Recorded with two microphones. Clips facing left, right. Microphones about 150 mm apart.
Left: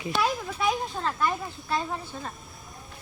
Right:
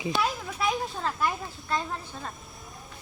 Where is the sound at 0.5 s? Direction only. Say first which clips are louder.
Left 1 dB; centre (ahead or behind).